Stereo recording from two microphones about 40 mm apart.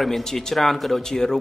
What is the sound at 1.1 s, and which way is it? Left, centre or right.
Speech, centre.